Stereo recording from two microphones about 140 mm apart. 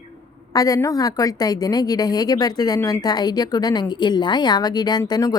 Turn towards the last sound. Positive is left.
turn(degrees=30)  # may be behind; listen again after turning